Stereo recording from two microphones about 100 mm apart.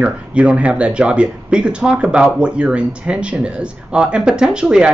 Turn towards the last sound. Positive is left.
turn(degrees=-10)  # may be behind; listen again after turning